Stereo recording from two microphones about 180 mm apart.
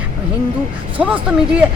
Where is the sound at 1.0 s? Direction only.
10° right (ahead or behind).